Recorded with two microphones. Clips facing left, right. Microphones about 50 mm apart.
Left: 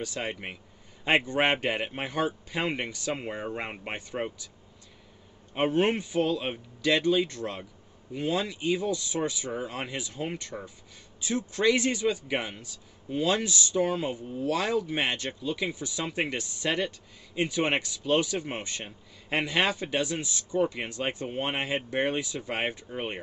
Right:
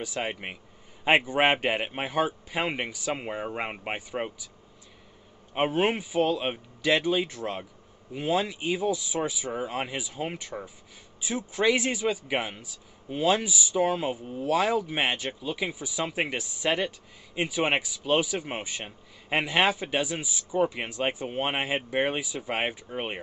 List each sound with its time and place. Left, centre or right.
0.0 s a man's voice: centre
5.5 s a man's voice: centre